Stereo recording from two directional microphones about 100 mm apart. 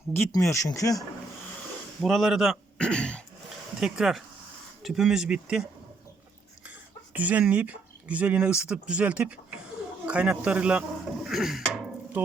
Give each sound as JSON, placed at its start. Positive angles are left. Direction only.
{"t": 0.3, "sound": "speech", "side_deg": 35}
{"t": 2.0, "sound": "speech", "side_deg": 0}
{"t": 2.7, "sound": "throat clearing", "side_deg": 10}
{"t": 3.8, "sound": "speech", "side_deg": -5}
{"t": 7.1, "sound": "speech", "side_deg": -15}